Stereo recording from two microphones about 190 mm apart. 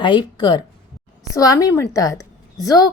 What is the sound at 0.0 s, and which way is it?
A woman's voice, 25° left (ahead or behind).